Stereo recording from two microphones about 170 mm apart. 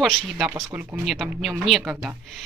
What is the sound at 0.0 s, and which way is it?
Speech, 5° left (ahead or behind).